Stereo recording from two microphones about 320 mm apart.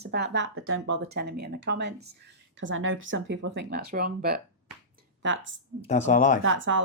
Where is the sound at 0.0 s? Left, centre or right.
Right.